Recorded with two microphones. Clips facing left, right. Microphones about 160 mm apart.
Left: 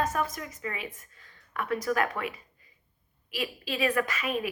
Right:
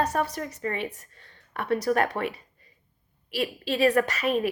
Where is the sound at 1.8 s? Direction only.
35° right (ahead or behind).